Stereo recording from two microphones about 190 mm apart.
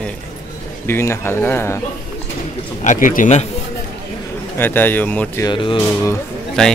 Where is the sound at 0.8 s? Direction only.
15° left (ahead or behind).